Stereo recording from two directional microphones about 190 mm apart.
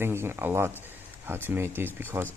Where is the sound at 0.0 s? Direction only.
10° right (ahead or behind).